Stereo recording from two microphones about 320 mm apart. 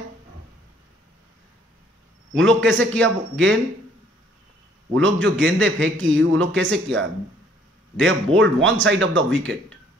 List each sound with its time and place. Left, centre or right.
2.3 s a man's voice: right
4.9 s a man's voice: right